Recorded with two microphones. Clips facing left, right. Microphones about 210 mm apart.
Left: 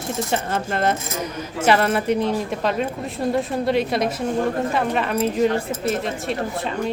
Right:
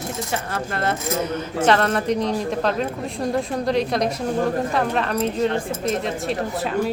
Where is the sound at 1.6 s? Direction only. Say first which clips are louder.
Left 1 dB; 10° left (ahead or behind).